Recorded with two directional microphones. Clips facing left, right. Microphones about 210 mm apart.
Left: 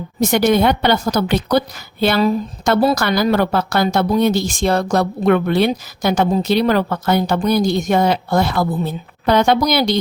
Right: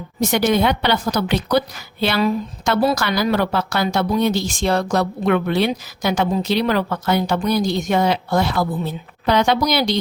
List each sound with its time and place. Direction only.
0.2 s a woman's voice: 50° left (ahead or behind)